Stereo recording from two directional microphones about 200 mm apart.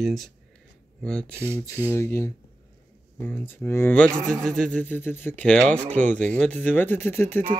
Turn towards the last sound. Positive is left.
turn(degrees=10)  # may be behind; listen again after turning